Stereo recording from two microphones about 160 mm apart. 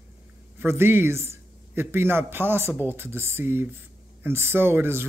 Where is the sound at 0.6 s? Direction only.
15° right (ahead or behind).